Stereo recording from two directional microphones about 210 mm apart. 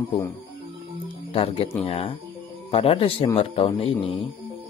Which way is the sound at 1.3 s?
25° left (ahead or behind).